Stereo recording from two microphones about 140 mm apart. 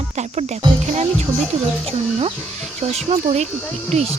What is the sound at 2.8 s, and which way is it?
Speech, 50° right (ahead or behind).